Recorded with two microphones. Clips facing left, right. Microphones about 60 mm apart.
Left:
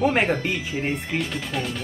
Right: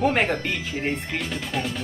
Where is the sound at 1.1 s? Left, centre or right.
Centre.